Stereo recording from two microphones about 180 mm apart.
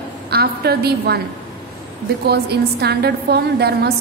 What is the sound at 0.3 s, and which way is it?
Speech, 60° right (ahead or behind).